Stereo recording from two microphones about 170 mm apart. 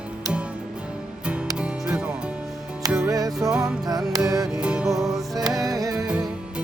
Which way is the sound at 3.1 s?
20° right (ahead or behind).